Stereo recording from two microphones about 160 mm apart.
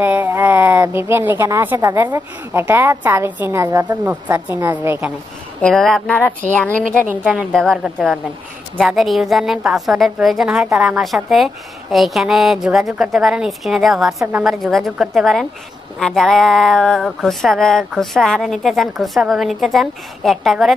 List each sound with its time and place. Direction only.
0.0 s speech: 10° right (ahead or behind)
5.6 s a woman's voice: 5° left (ahead or behind)
6.8 s a woman's voice: 55° right (ahead or behind)
7.5 s a woman's voice: centre (ahead or behind)